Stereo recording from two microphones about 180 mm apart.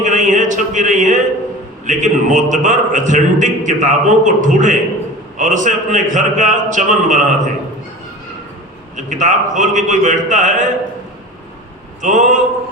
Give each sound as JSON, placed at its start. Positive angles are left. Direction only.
{"t": 0.0, "sound": "a sound", "side_deg": -45}
{"t": 1.9, "sound": "a man's voice", "side_deg": -45}
{"t": 9.0, "sound": "a man's voice", "side_deg": -45}
{"t": 12.0, "sound": "a man's voice", "side_deg": -45}